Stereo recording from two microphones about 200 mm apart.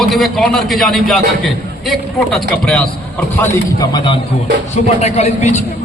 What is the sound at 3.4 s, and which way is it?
Speech, 20° left (ahead or behind).